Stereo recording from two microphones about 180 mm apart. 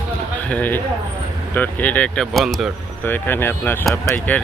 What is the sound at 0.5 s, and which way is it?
Speech, 10° left (ahead or behind).